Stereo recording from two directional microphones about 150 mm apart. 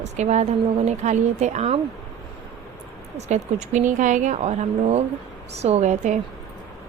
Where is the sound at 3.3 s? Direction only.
50° right (ahead or behind).